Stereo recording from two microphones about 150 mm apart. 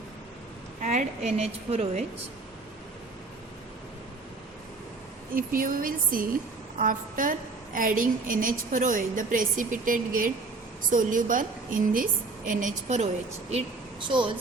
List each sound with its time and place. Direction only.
0.8 s a woman's voice: 50° right (ahead or behind)
5.3 s a woman's voice: 70° right (ahead or behind)
13.5 s a woman's voice: 40° right (ahead or behind)